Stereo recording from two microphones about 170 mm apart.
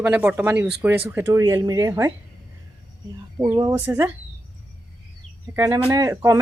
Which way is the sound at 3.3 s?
15° right (ahead or behind).